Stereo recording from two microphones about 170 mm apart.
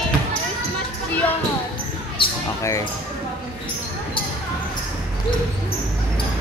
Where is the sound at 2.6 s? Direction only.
20° left (ahead or behind).